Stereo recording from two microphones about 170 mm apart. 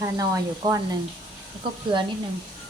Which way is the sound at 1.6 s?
30° right (ahead or behind).